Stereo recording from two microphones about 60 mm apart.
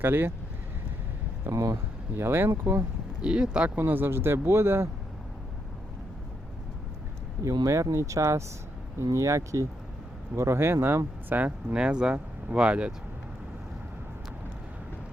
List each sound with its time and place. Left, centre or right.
0.0 s speech: right
1.5 s speech: right
2.1 s speech: right
3.2 s speech: centre
3.8 s speech: right
7.4 s speech: right
10.3 s speech: right
11.8 s speech: centre